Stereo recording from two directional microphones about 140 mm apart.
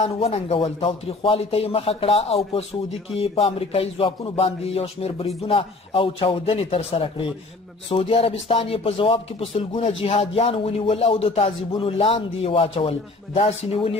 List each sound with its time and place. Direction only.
0.0 s speech: 50° left (ahead or behind)